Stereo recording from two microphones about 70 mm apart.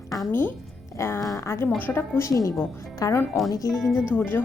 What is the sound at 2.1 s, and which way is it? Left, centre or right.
A woman's voice, left.